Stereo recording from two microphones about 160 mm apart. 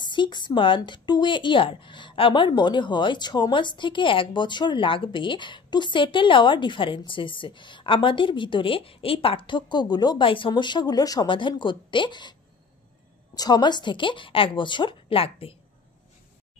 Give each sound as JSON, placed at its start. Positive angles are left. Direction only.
{"t": 0.0, "sound": "a woman's voice", "side_deg": 30}